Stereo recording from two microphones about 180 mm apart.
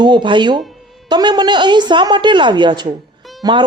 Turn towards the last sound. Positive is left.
turn(degrees=-25)  # may be behind; listen again after turning